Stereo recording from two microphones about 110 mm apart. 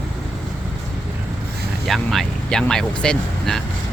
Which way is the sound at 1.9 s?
5° left (ahead or behind).